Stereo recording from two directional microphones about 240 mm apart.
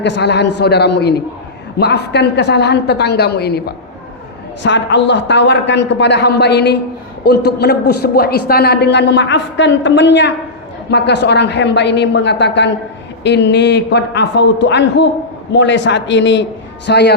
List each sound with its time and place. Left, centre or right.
0.0 s a man's voice: left